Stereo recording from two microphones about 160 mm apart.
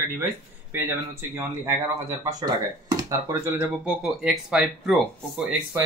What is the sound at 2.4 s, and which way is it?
Speech, 25° right (ahead or behind).